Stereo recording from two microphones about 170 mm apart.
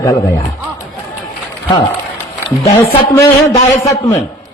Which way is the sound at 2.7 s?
20° left (ahead or behind).